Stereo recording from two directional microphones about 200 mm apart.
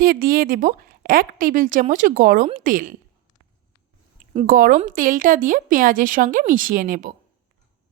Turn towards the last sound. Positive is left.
turn(degrees=-45)  # may be behind; listen again after turning